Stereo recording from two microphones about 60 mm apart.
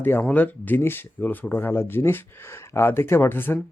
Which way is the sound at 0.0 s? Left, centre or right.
Left.